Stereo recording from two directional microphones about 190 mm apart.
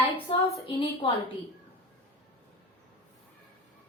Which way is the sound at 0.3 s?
30° left (ahead or behind).